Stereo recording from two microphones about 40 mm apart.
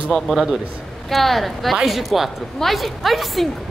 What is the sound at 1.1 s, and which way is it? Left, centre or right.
A woman's voice, centre.